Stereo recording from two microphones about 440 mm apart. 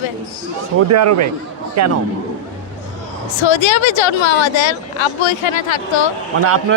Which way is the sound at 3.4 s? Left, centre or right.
Left.